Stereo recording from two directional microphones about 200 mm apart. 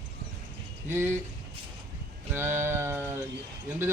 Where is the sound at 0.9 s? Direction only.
10° right (ahead or behind).